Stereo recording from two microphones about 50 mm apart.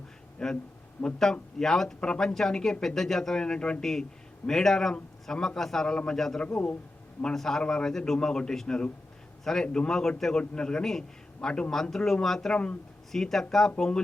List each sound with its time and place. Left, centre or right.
0.3 s a man's voice: centre
6.1 s a man's voice: centre
11.7 s a man's voice: centre